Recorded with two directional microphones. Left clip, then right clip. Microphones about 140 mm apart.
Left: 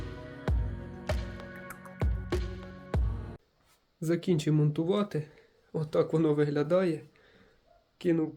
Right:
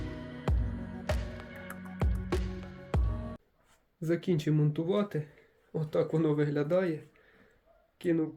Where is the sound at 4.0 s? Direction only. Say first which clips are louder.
Left 1 dB; 10° left (ahead or behind).